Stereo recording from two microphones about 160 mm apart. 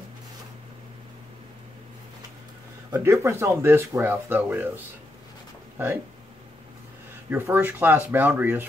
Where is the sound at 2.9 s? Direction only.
15° right (ahead or behind).